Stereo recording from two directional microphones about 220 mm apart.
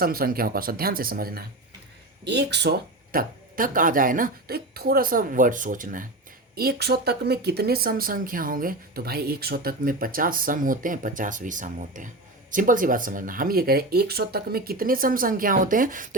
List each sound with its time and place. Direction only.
0.0 s speech: 40° right (ahead or behind)